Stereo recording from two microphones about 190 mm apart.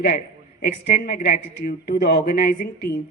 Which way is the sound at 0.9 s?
50° left (ahead or behind).